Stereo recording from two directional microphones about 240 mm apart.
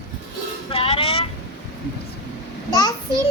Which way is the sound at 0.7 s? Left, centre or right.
Left.